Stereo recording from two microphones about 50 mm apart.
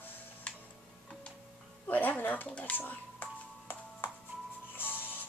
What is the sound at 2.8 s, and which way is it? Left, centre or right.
Speech, left.